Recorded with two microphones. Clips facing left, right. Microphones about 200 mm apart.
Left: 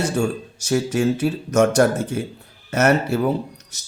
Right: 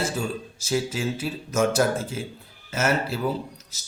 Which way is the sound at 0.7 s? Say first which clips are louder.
Left 7 dB; 65° left (ahead or behind).